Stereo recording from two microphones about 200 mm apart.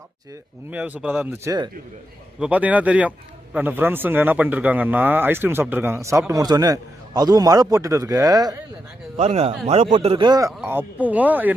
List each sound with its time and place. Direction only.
0.7 s speech: 10° right (ahead or behind)
2.4 s speech: 5° right (ahead or behind)
9.1 s speech: 35° right (ahead or behind); by 11.5 s 10° right (ahead or behind)